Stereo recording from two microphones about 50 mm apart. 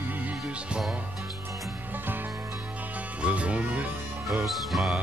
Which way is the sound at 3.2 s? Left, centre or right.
Right.